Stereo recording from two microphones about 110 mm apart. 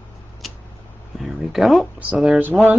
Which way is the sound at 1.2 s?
Centre (ahead or behind).